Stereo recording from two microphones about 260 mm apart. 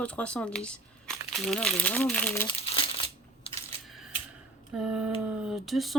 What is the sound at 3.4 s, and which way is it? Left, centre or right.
Camera, left.